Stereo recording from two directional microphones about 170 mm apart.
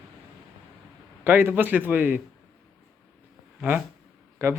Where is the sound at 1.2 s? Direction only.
10° right (ahead or behind).